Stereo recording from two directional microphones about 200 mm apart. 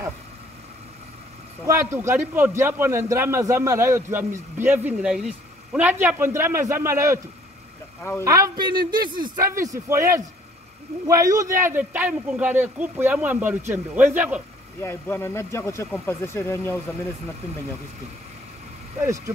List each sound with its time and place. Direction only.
1.7 s a man's voice: 15° right (ahead or behind)
8.2 s a man's voice: 15° right (ahead or behind)
14.8 s speech: 10° left (ahead or behind)
18.9 s a man's voice: 15° right (ahead or behind)